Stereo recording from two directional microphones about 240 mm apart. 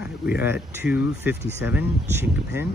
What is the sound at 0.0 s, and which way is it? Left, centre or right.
Speech, centre.